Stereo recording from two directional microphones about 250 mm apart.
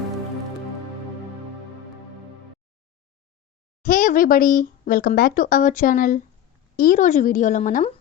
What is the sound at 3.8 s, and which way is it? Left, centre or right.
A woman's voice, left.